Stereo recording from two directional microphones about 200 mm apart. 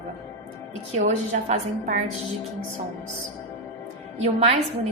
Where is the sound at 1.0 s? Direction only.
35° right (ahead or behind).